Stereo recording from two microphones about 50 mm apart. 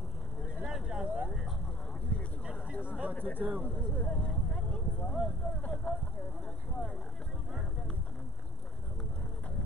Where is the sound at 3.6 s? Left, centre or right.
Left.